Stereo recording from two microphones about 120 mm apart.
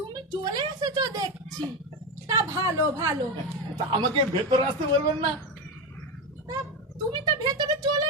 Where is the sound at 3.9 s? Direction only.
45° right (ahead or behind).